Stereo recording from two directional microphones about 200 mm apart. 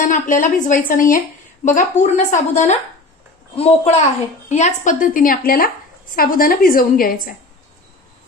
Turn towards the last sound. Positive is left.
turn(degrees=45)  # may be behind; listen again after turning